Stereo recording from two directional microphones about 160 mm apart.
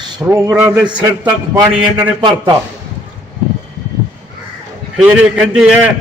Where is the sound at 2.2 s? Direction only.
30° right (ahead or behind).